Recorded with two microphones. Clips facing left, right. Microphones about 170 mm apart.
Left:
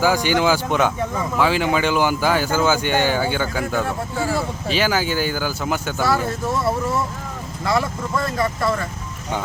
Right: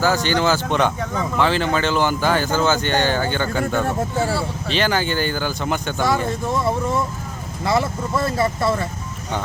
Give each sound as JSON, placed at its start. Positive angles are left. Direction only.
{"t": 0.0, "sound": "speech", "side_deg": 10}
{"t": 7.8, "sound": "speech", "side_deg": -25}